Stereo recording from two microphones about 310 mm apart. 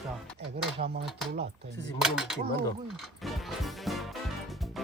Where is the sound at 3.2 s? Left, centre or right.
Centre.